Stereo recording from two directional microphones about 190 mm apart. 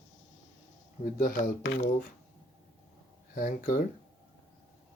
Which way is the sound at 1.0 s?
45° left (ahead or behind).